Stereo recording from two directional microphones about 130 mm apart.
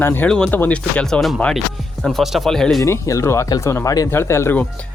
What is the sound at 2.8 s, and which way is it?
Speech, 25° left (ahead or behind).